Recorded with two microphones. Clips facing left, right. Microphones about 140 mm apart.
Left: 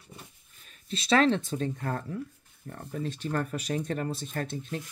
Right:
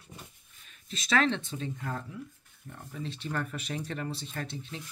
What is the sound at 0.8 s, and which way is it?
Speech, 35° left (ahead or behind).